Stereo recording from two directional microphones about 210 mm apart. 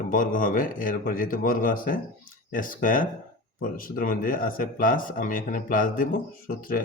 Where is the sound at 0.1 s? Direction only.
40° left (ahead or behind).